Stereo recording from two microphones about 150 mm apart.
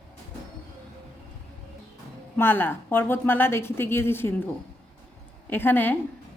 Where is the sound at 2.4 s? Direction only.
15° left (ahead or behind).